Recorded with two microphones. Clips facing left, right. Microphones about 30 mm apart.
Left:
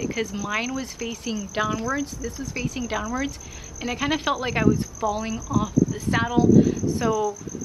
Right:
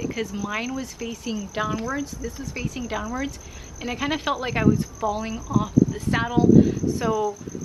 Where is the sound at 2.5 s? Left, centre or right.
Centre.